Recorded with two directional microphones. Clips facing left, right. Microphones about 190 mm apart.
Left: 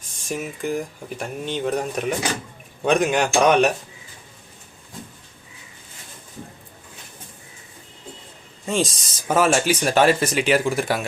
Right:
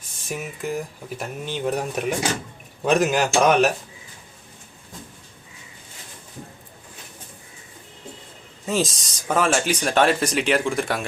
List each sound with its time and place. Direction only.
0.3 s speech: 5° right (ahead or behind)
8.6 s speech: centre (ahead or behind)